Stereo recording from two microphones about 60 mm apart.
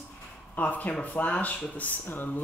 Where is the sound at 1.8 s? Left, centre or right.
Left.